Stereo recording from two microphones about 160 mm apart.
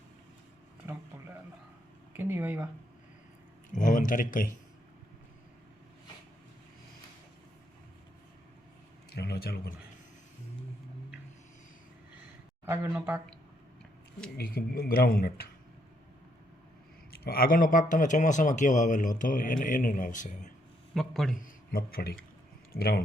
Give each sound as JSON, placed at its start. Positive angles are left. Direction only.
{"t": 2.1, "sound": "speech", "side_deg": -15}
{"t": 3.7, "sound": "a man's voice", "side_deg": 55}
{"t": 9.0, "sound": "a man's voice", "side_deg": 90}
{"t": 12.6, "sound": "speech", "side_deg": -15}
{"t": 14.3, "sound": "speech", "side_deg": 70}
{"t": 17.1, "sound": "a man's voice", "side_deg": 70}
{"t": 20.9, "sound": "a man's voice", "side_deg": 0}
{"t": 21.3, "sound": "speech", "side_deg": 65}